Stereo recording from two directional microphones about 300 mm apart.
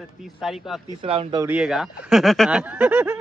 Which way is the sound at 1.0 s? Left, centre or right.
Centre.